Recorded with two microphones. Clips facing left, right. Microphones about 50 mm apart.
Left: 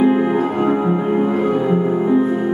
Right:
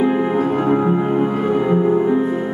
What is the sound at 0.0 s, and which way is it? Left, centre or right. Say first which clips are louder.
Music: left 2 dB; centre.